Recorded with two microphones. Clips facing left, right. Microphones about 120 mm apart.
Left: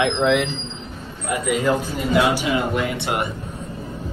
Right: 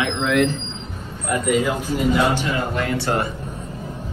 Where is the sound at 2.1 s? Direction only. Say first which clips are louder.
Left 4 dB; 10° left (ahead or behind).